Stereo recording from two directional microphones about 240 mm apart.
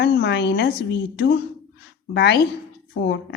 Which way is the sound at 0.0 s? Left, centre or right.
Left.